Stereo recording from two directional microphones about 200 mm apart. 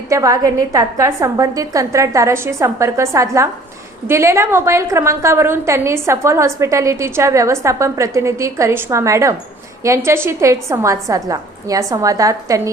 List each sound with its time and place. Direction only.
0.1 s a woman's voice: 15° right (ahead or behind)